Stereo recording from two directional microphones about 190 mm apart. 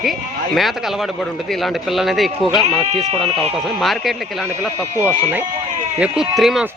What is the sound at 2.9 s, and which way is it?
Speech, 35° right (ahead or behind).